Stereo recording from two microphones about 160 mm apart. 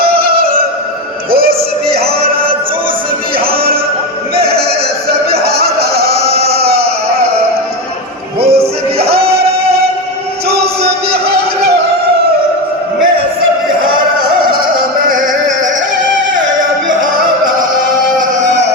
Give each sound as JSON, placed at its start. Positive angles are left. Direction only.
{"t": 0.0, "sound": "music", "side_deg": -70}
{"t": 5.5, "sound": "music", "side_deg": -75}
{"t": 6.4, "sound": "music", "side_deg": -40}
{"t": 8.4, "sound": "music", "side_deg": -40}
{"t": 15.1, "sound": "music", "side_deg": -50}